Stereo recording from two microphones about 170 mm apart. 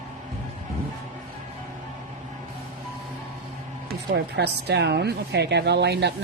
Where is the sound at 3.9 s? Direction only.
75° right (ahead or behind).